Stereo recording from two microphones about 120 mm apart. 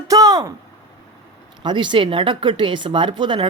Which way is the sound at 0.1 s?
30° right (ahead or behind).